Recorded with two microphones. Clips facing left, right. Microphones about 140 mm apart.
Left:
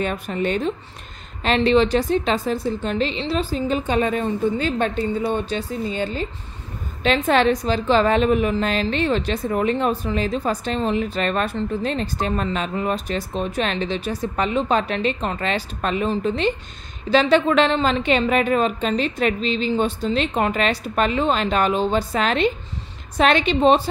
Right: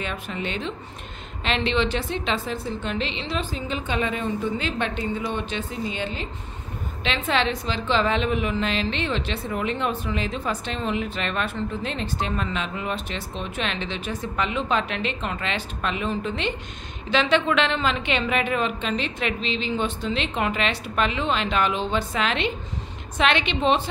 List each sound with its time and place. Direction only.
0.0 s a woman's voice: 45° left (ahead or behind)